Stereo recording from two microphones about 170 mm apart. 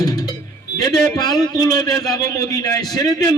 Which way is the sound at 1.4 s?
20° left (ahead or behind).